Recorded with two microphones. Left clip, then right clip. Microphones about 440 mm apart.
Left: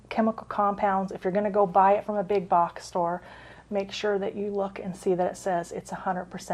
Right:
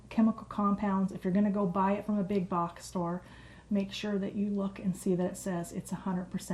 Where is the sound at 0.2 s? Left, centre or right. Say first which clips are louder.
Left 6 dB; left.